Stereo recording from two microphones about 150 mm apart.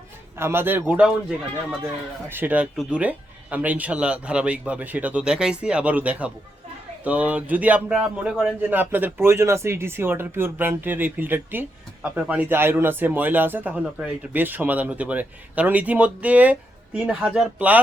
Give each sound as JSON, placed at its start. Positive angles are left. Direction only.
{"t": 0.3, "sound": "speech", "side_deg": -15}
{"t": 2.3, "sound": "speech", "side_deg": -10}